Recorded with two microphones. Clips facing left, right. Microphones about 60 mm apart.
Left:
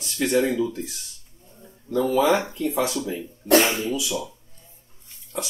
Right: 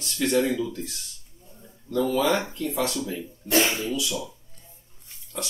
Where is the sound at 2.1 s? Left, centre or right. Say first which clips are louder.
Left 5 dB; centre.